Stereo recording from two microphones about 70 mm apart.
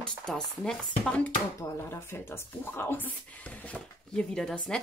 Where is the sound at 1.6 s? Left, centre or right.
Left.